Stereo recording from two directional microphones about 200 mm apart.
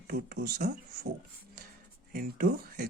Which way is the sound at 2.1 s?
50° right (ahead or behind).